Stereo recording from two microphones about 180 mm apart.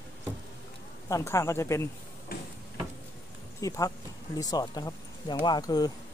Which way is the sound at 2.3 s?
55° left (ahead or behind).